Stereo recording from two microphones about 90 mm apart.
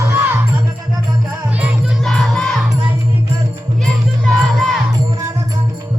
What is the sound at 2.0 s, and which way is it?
Music, centre (ahead or behind).